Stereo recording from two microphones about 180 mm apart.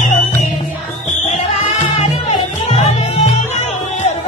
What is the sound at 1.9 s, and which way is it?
Music, 35° left (ahead or behind).